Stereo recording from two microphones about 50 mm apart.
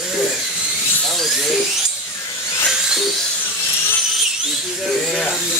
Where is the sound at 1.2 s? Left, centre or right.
Centre.